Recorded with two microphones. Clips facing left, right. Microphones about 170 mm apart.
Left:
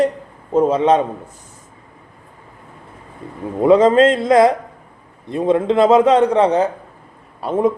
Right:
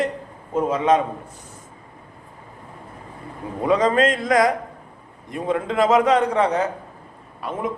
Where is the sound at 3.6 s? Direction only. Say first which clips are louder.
Left 7 dB; 30° left (ahead or behind).